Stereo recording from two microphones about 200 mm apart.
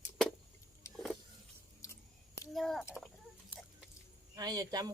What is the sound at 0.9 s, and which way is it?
Vehicle, centre (ahead or behind).